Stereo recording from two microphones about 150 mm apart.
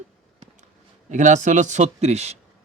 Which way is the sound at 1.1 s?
55° right (ahead or behind).